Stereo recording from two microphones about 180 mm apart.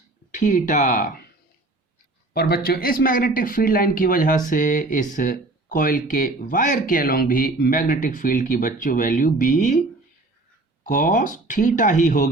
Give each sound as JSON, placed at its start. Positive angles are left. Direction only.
{"t": 0.3, "sound": "speech", "side_deg": 45}
{"t": 2.3, "sound": "speech", "side_deg": 60}
{"t": 10.8, "sound": "speech", "side_deg": 50}